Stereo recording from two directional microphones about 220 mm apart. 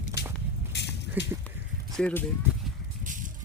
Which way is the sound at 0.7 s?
50° left (ahead or behind).